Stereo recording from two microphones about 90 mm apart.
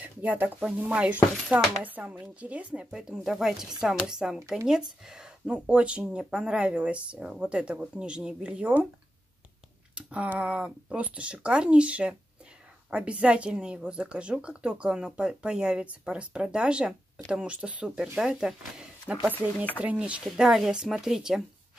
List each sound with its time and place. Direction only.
0.0 s speech: 20° right (ahead or behind)
9.9 s speech: 10° right (ahead or behind)
19.3 s speech: 20° left (ahead or behind)
19.8 s a woman's voice: 15° right (ahead or behind)